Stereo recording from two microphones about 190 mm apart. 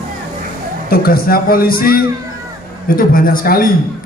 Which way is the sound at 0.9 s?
50° left (ahead or behind).